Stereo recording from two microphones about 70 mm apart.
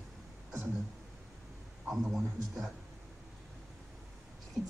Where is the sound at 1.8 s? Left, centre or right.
Centre.